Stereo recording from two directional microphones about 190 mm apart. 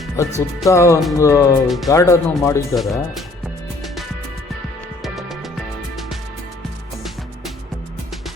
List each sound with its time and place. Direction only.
0.2 s speech: 15° left (ahead or behind)
1.6 s speech: centre (ahead or behind)
1.9 s speech: 15° left (ahead or behind)
2.7 s speech: centre (ahead or behind)
5.0 s music: centre (ahead or behind)